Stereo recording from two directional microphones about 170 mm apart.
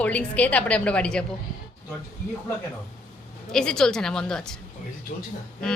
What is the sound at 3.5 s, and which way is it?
A woman's voice, 5° left (ahead or behind).